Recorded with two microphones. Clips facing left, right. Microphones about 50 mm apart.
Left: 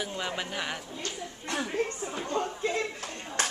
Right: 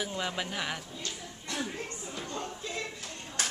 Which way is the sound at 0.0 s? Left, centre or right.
Centre.